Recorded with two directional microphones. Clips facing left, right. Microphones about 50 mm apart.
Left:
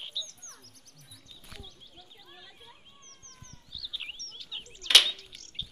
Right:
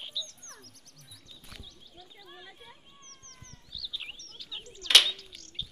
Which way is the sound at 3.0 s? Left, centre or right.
Right.